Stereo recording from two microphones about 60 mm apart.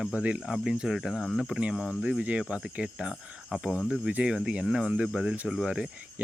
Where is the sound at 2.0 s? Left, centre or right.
Right.